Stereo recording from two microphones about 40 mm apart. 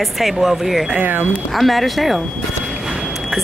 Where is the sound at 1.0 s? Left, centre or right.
Right.